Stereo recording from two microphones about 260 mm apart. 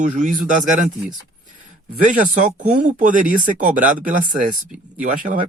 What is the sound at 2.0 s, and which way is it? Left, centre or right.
Speech, right.